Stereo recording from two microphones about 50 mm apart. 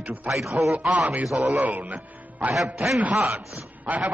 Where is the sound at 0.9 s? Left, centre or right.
Right.